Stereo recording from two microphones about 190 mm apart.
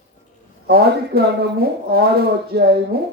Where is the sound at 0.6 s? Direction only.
55° right (ahead or behind).